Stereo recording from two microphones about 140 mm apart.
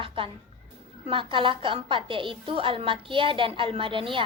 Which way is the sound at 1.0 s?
40° right (ahead or behind).